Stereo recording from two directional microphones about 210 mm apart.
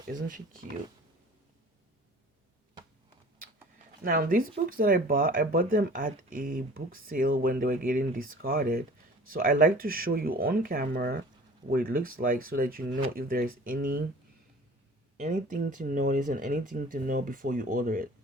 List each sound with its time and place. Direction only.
0.1 s speech: 40° right (ahead or behind)
4.0 s speech: 40° right (ahead or behind)
15.2 s speech: 35° right (ahead or behind)